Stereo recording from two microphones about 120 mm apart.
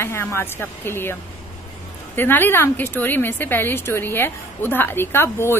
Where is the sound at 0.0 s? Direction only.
20° left (ahead or behind).